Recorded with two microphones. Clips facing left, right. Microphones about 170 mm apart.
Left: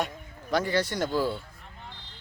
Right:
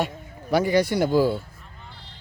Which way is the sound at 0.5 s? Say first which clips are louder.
Right 6 dB; 10° right (ahead or behind).